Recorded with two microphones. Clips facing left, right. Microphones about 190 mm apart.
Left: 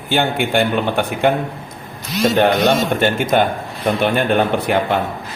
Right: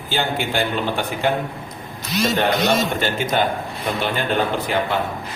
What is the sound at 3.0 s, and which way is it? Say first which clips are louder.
Speech: left 5 dB; 55° left (ahead or behind).